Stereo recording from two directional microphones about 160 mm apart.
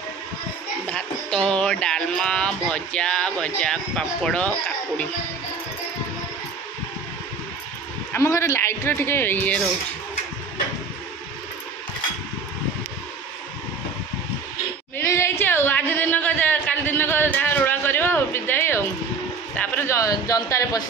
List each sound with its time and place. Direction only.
0.8 s speech: 5° left (ahead or behind)
8.1 s a woman's voice: 15° left (ahead or behind)
15.0 s a woman's voice: 15° left (ahead or behind)